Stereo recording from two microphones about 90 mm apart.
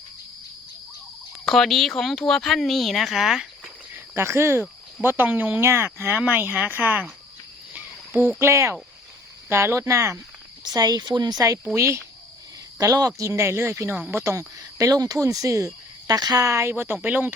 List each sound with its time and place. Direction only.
1.5 s speech: 5° left (ahead or behind)
3.9 s speech: 30° right (ahead or behind)
7.7 s a sound: 20° right (ahead or behind)
8.4 s speech: 30° right (ahead or behind)
10.8 s speech: 45° right (ahead or behind)
11.7 s speech: 30° right (ahead or behind)
12.8 s speech: 40° right (ahead or behind); by 17.3 s 20° right (ahead or behind)